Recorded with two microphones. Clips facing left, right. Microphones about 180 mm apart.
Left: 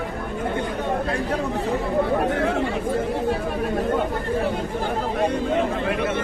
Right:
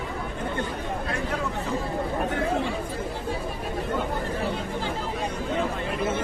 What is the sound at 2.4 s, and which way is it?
Chatter, 70° left (ahead or behind).